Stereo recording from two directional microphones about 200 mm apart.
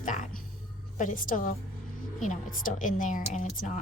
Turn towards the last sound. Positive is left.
turn(degrees=40)  # may be behind; listen again after turning